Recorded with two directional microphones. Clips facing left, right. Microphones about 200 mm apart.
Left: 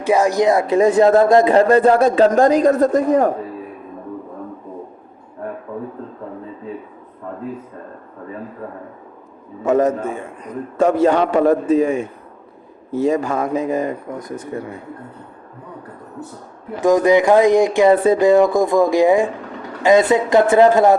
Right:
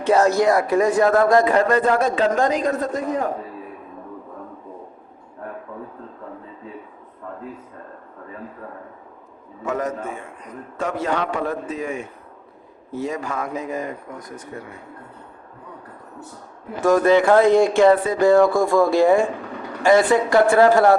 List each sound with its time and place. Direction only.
0.0 s a man's voice: 10° left (ahead or behind); by 3.2 s 40° left (ahead or behind)
9.6 s a man's voice: 30° left (ahead or behind)
16.8 s a man's voice: 15° left (ahead or behind)